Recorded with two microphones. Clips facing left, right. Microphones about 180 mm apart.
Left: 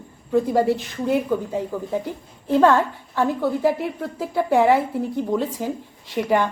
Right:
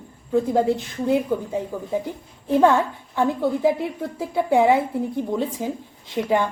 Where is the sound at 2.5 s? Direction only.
15° right (ahead or behind).